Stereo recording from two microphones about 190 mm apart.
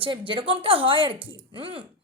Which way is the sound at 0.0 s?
25° right (ahead or behind).